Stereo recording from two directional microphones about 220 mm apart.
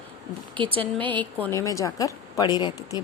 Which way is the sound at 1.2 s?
10° left (ahead or behind).